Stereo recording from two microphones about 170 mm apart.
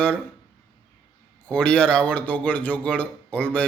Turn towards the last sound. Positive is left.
turn(degrees=5)  # may be behind; listen again after turning